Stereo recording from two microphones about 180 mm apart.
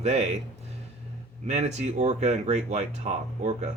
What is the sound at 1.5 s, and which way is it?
Speech, 40° right (ahead or behind).